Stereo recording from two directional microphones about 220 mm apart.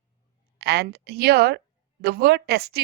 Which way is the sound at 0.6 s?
50° right (ahead or behind).